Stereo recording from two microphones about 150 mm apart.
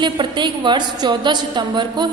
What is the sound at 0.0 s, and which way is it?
A woman's voice, 30° right (ahead or behind).